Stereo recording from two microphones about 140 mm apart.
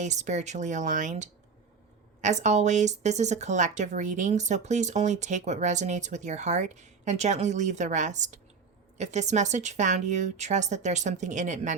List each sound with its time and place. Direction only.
0.0 s speech: 55° right (ahead or behind)